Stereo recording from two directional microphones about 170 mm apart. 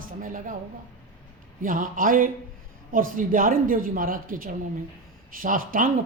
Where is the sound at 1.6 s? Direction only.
55° right (ahead or behind).